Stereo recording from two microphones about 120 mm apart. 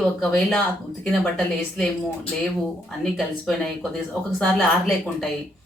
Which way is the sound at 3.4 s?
5° left (ahead or behind).